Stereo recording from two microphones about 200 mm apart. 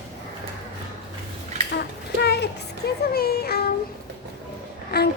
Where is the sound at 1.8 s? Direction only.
55° left (ahead or behind).